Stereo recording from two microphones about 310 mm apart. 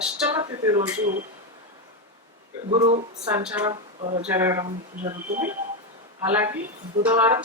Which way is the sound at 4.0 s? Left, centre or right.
Centre.